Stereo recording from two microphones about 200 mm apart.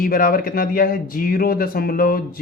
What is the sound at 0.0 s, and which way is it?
Speech, 45° left (ahead or behind).